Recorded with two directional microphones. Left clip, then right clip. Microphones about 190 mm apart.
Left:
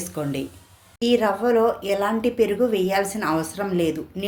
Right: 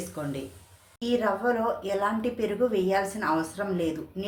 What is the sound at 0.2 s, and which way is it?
A woman's voice, 40° left (ahead or behind).